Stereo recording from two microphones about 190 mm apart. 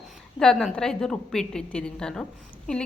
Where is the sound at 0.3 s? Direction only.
5° left (ahead or behind).